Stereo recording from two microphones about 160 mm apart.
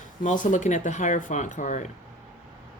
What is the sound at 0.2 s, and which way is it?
Speech, 55° left (ahead or behind).